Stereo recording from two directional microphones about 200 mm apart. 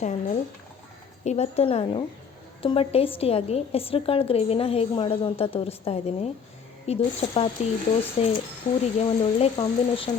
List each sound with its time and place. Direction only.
0.0 s a woman's voice: 35° left (ahead or behind)
9.0 s a woman's voice: 30° left (ahead or behind)